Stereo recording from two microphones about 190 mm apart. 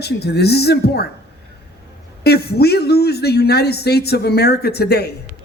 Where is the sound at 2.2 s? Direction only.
55° left (ahead or behind).